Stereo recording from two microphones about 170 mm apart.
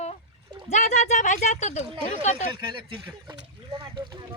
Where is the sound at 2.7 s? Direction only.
30° right (ahead or behind).